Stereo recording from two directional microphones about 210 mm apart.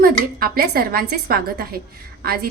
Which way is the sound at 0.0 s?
45° right (ahead or behind).